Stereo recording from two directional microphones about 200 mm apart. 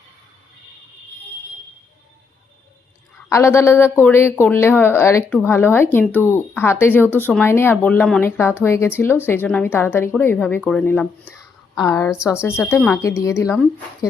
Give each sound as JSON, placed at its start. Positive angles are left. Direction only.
{"t": 3.2, "sound": "speech", "side_deg": 15}
{"t": 11.8, "sound": "speech", "side_deg": 15}